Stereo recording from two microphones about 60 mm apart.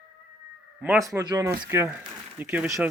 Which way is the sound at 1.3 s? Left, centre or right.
Right.